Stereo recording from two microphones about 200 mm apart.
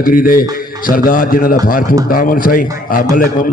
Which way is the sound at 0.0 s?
45° left (ahead or behind).